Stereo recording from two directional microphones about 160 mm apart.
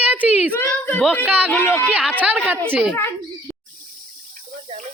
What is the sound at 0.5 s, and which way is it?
Speech, 10° left (ahead or behind).